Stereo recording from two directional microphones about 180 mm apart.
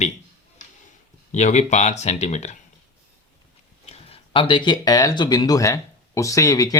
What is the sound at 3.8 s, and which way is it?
Speech, 35° left (ahead or behind).